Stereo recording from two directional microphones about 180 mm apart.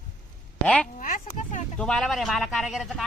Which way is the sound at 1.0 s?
50° left (ahead or behind).